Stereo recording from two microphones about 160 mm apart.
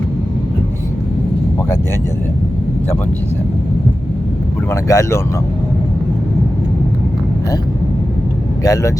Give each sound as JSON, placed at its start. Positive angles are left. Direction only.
{"t": 4.7, "sound": "speech", "side_deg": 20}
{"t": 8.6, "sound": "speech", "side_deg": 20}